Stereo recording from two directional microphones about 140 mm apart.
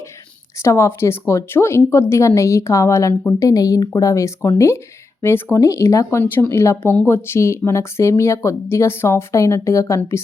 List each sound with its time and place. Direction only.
0.6 s speech: 20° left (ahead or behind)